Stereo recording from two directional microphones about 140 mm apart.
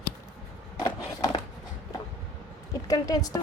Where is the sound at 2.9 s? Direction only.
25° left (ahead or behind).